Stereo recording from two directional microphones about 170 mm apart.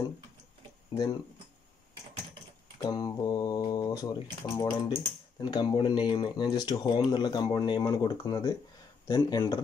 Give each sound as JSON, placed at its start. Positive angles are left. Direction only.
{"t": 2.8, "sound": "speech", "side_deg": 20}